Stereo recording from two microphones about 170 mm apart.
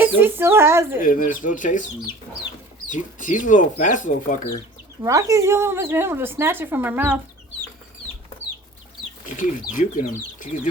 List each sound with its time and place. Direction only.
0.0 s speech: 10° right (ahead or behind)
1.0 s speech: 55° left (ahead or behind)
2.9 s speech: 50° left (ahead or behind)
5.0 s speech: 20° right (ahead or behind)
9.2 s speech: 50° left (ahead or behind)